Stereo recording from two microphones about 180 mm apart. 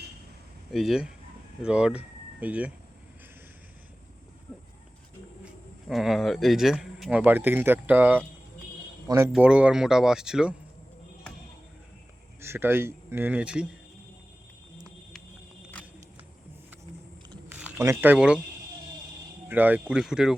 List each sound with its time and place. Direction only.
0.7 s speech: centre (ahead or behind)
5.9 s speech: centre (ahead or behind)
12.4 s speech: 15° right (ahead or behind)
17.5 s speech: 10° right (ahead or behind)
19.5 s speech: 10° right (ahead or behind)